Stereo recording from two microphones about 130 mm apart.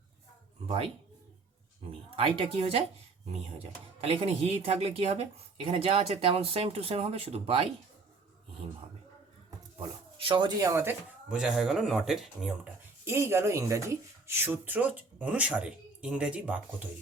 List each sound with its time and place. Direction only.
2.0 s speech: 45° right (ahead or behind)
4.0 s speech: 50° right (ahead or behind)
9.8 s a sound: 45° right (ahead or behind)
10.6 s speech: 20° right (ahead or behind)
11.3 s speech: 5° right (ahead or behind)
13.1 s speech: 20° right (ahead or behind)